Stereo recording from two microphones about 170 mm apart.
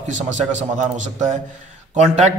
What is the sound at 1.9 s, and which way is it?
Speech, 40° right (ahead or behind).